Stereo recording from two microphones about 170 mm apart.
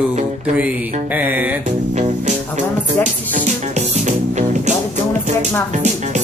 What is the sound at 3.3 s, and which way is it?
Music, 45° right (ahead or behind).